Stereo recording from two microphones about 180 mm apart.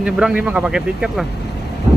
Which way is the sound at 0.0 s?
5° right (ahead or behind).